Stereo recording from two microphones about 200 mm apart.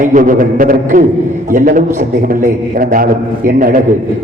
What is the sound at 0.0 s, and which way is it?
A man's voice, 40° right (ahead or behind).